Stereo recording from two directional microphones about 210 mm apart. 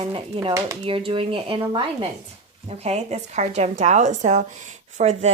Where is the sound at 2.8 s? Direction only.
30° right (ahead or behind).